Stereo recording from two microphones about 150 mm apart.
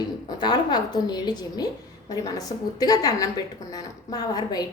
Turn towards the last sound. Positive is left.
turn(degrees=25)  # may be behind; listen again after turning